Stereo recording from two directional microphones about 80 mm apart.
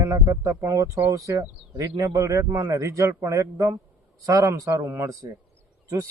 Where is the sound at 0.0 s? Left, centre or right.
Right.